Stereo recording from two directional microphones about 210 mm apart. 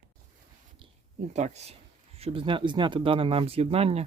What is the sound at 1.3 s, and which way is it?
Speech, 30° right (ahead or behind).